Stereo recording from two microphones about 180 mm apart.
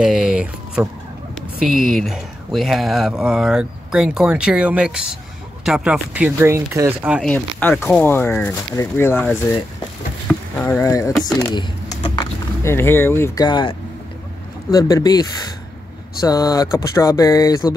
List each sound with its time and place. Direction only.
0.0 s a sound: 5° right (ahead or behind)
1.6 s speech: centre (ahead or behind)
7.2 s speech: 10° left (ahead or behind)